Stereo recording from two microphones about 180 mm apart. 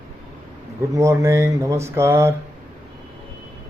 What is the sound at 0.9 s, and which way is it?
Speech, 15° right (ahead or behind).